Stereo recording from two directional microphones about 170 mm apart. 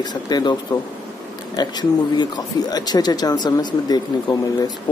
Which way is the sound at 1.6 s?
25° left (ahead or behind).